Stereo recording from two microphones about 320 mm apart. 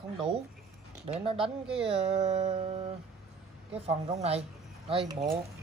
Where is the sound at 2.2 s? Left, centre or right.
Right.